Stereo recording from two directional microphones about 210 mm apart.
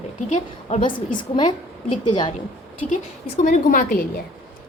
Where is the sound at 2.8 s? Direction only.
35° left (ahead or behind).